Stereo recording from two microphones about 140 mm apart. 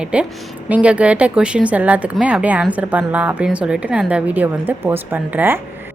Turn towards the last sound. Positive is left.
turn(degrees=-15)  # may be behind; listen again after turning